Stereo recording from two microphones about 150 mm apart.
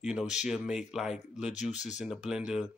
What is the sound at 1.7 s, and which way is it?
Speech, 50° left (ahead or behind).